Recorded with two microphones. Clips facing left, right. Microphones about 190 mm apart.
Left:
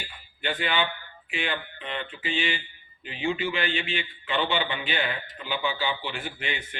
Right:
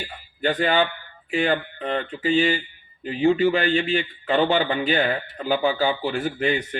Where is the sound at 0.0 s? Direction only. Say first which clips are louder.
Right 9 dB; 40° right (ahead or behind).